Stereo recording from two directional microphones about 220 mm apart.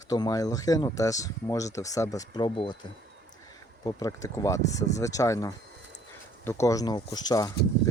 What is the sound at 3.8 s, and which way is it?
Speech, 15° left (ahead or behind).